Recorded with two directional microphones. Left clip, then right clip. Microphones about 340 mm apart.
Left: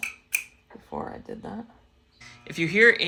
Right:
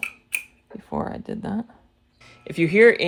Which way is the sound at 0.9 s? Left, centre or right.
Right.